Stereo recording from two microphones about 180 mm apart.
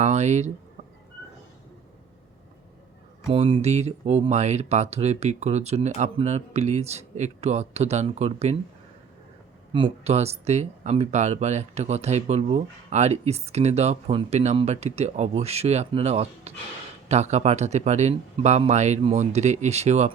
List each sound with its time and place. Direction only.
0.0 s speech: 40° right (ahead or behind)
3.2 s speech: 30° right (ahead or behind)
9.7 s speech: 30° right (ahead or behind)